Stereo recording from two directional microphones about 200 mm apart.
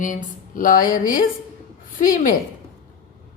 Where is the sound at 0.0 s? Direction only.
40° left (ahead or behind).